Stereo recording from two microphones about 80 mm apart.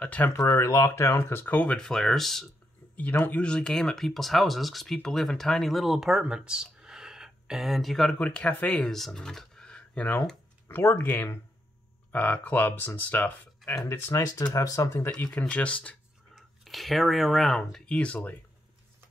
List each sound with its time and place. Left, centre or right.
0.0 s speech: centre
0.3 s speech: left
1.7 s speech: centre
3.3 s speech: centre
8.2 s speech: centre
10.7 s speech: left
15.3 s speech: centre
16.3 s speech: centre